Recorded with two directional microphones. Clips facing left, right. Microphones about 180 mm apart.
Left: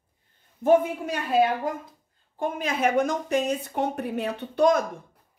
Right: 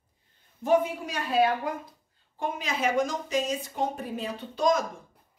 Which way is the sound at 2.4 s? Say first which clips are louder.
Left 4 dB; 55° left (ahead or behind).